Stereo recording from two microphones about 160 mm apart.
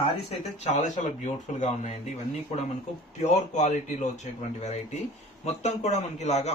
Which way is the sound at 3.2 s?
45° left (ahead or behind).